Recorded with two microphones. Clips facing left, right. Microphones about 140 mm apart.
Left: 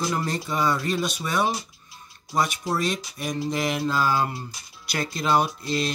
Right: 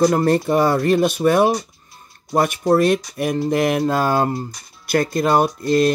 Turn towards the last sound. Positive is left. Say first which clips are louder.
# right 11 dB
turn(degrees=-50)  # may be behind; listen again after turning